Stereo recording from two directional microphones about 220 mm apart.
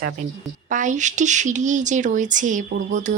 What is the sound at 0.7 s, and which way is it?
A woman's voice, 35° right (ahead or behind).